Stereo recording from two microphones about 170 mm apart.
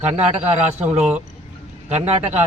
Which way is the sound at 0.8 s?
10° right (ahead or behind).